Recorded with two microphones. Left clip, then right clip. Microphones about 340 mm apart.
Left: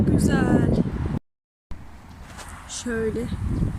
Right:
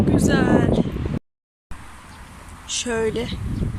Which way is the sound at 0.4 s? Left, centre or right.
Right.